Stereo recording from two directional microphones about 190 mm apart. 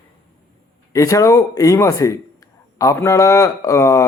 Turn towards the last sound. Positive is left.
turn(degrees=15)  # may be behind; listen again after turning